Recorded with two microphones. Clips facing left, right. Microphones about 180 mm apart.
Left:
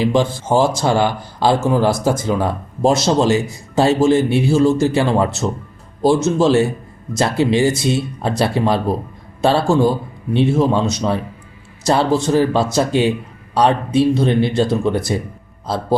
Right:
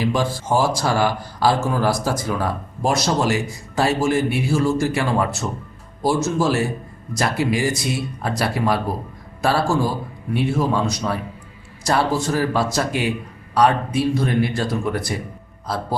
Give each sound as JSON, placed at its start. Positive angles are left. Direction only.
{"t": 0.0, "sound": "speech", "side_deg": 25}